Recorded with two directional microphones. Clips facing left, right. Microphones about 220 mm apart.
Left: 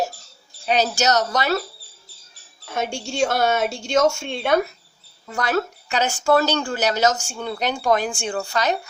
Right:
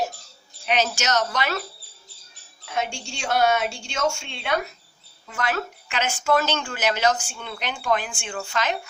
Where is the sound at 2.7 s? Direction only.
45° left (ahead or behind).